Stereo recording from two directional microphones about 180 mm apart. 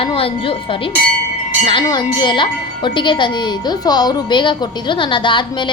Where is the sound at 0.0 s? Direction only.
30° left (ahead or behind).